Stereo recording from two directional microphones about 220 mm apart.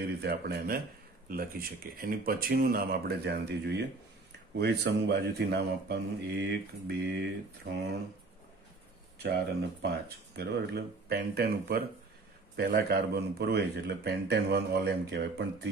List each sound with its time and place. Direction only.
0.2 s speech: 45° right (ahead or behind)
9.2 s speech: 50° right (ahead or behind)